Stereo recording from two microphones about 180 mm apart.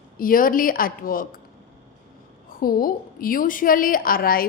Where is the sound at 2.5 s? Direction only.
55° left (ahead or behind).